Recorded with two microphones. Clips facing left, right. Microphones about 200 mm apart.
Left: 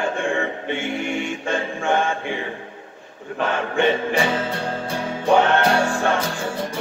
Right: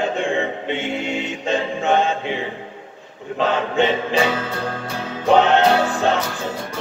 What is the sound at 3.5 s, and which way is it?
Choir, 20° right (ahead or behind).